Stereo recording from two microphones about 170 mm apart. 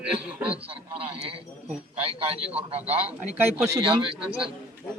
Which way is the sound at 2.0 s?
35° right (ahead or behind).